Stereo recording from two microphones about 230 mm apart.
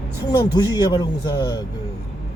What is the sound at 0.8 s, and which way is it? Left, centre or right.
Speech, centre.